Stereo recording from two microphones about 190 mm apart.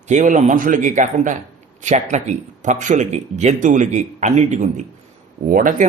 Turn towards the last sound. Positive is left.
turn(degrees=-45)  # may be behind; listen again after turning